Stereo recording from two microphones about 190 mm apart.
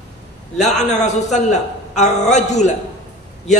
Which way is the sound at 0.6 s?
40° left (ahead or behind).